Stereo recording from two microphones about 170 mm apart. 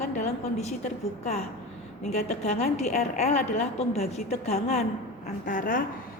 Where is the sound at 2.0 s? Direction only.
40° left (ahead or behind).